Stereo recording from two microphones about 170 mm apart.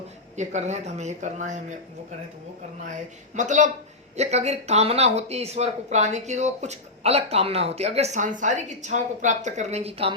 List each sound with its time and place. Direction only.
0.3 s speech: 45° right (ahead or behind)
3.3 s speech: 45° right (ahead or behind)